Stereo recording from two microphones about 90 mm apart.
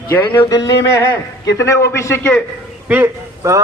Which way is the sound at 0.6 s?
40° left (ahead or behind).